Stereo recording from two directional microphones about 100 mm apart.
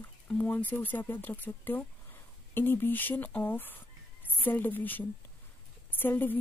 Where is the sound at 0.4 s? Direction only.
15° left (ahead or behind).